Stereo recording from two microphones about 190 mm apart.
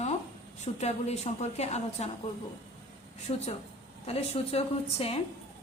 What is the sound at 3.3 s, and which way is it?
Speech, 30° left (ahead or behind).